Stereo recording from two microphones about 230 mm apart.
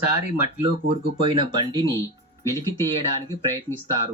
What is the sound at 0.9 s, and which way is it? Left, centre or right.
Speech, right.